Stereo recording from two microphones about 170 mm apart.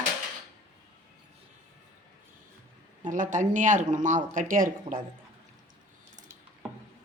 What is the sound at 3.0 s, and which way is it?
A woman's voice, 50° right (ahead or behind).